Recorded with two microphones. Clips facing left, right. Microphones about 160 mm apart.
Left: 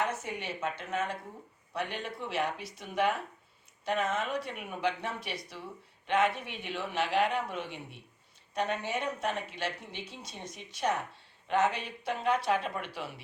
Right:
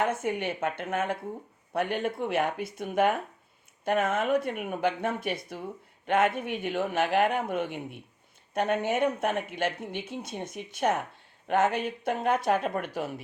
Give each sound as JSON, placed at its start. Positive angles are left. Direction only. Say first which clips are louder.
{"t": 0.0, "sound": "speech", "louder": "right 6 dB", "side_deg": -55}